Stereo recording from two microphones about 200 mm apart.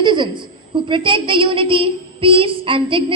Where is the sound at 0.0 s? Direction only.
25° right (ahead or behind).